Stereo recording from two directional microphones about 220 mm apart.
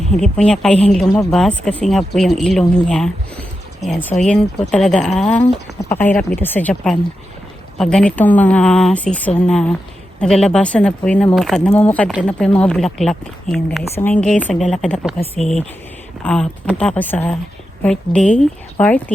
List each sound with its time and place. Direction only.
0.2 s speech: 5° left (ahead or behind)
1.0 s speech: 20° left (ahead or behind)
1.3 s speech: centre (ahead or behind)